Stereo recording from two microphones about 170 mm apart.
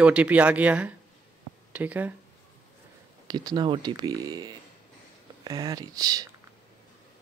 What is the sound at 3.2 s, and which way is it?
Speech, 25° right (ahead or behind).